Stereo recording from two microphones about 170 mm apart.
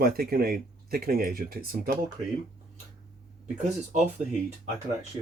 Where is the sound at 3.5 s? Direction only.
45° right (ahead or behind).